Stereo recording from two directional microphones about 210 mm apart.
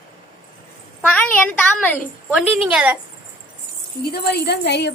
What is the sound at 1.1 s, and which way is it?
A woman's voice, 5° left (ahead or behind).